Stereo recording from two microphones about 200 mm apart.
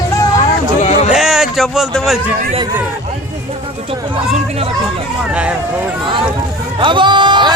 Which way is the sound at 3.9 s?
30° right (ahead or behind).